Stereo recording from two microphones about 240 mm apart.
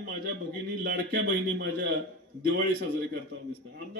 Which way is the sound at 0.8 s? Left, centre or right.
Right.